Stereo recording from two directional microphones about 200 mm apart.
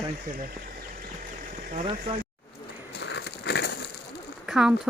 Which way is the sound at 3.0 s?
60° left (ahead or behind).